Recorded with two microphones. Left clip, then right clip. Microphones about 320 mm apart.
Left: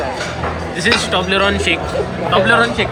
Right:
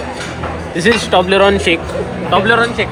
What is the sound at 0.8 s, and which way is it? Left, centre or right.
A man's voice, centre.